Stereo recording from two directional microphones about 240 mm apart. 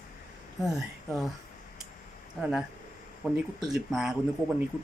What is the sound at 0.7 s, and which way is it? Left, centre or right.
Speech, centre.